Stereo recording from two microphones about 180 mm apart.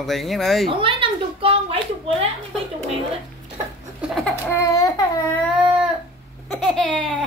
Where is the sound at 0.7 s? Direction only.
30° right (ahead or behind).